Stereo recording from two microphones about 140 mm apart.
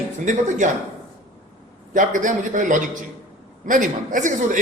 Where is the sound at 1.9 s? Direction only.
70° right (ahead or behind).